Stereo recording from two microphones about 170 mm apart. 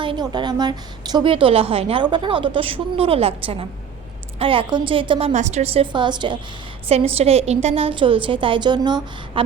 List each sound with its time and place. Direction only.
0.0 s a woman's voice: 30° right (ahead or behind)
5.3 s a woman's voice: 45° right (ahead or behind)
5.8 s a woman's voice: 25° right (ahead or behind)